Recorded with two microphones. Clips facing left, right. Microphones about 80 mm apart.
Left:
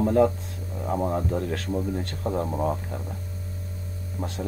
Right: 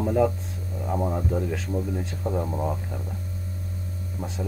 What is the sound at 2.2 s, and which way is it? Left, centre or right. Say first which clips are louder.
Speech: left 2 dB; left.